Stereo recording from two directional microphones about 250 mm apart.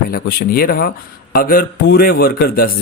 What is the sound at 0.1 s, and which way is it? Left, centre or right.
Speech, left.